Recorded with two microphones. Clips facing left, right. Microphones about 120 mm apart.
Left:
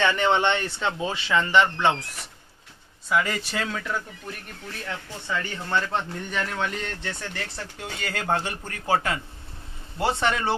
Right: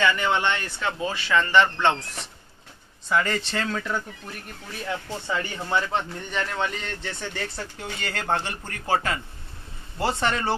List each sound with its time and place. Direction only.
0.2 s speech: 25° left (ahead or behind)
3.1 s speech: 5° left (ahead or behind)
4.8 s speech: 15° right (ahead or behind)
5.9 s speech: centre (ahead or behind)